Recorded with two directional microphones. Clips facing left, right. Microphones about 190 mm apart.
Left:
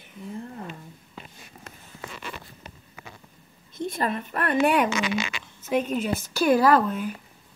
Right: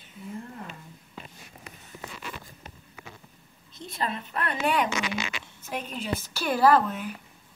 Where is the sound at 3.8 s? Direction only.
50° left (ahead or behind).